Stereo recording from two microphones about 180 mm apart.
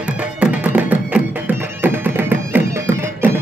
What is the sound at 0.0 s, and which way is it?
Music, 5° right (ahead or behind).